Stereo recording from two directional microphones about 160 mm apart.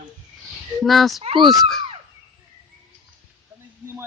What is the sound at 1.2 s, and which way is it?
Speech, 35° right (ahead or behind).